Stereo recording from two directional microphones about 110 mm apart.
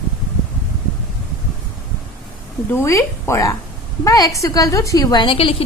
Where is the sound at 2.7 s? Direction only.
25° left (ahead or behind).